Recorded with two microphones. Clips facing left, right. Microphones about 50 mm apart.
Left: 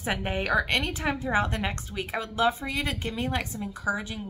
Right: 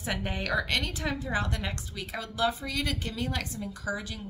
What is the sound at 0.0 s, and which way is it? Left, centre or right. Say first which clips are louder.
A woman's voice: left 4 dB; left.